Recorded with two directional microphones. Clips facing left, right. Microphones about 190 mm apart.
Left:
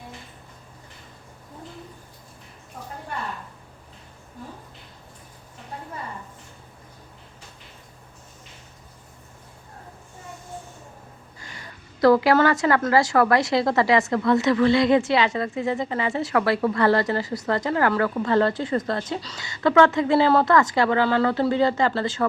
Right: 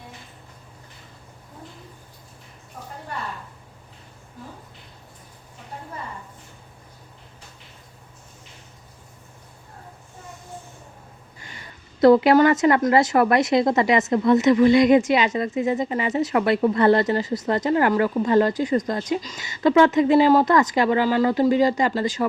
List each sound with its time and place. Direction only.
11.3 s a woman's voice: 20° right (ahead or behind)